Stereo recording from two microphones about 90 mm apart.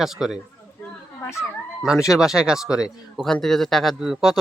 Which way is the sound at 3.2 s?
5° left (ahead or behind).